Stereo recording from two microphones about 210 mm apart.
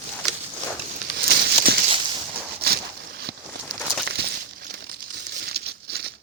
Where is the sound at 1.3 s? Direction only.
50° right (ahead or behind).